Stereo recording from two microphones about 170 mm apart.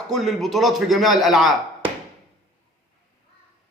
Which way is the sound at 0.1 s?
Centre (ahead or behind).